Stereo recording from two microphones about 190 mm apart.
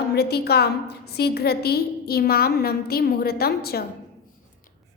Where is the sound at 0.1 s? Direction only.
60° left (ahead or behind).